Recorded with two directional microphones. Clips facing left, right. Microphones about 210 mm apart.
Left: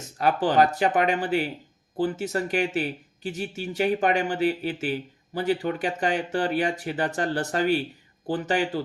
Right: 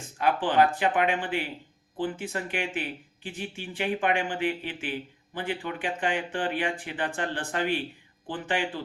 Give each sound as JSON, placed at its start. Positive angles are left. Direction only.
{"t": 0.0, "sound": "speech", "side_deg": 40}